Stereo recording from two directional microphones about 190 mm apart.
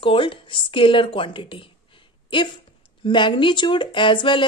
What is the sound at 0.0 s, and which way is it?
A woman's voice, 25° left (ahead or behind).